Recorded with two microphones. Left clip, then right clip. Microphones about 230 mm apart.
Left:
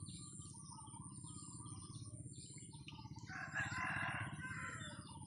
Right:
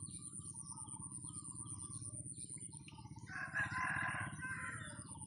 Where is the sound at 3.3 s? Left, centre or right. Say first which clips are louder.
Right 3 dB; left.